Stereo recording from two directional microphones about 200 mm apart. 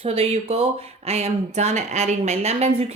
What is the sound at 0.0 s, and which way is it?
Speech, 30° right (ahead or behind).